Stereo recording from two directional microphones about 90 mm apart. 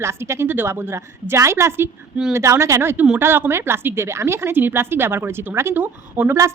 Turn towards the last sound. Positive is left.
turn(degrees=-20)  # may be behind; listen again after turning